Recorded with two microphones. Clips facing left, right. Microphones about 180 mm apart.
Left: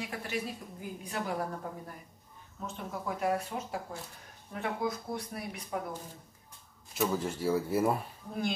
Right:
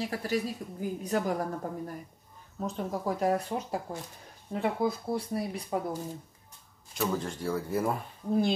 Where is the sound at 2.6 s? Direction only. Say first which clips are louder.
Right 6 dB; 35° right (ahead or behind).